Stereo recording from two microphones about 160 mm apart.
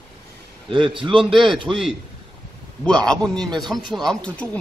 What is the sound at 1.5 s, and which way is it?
Speech, 30° right (ahead or behind).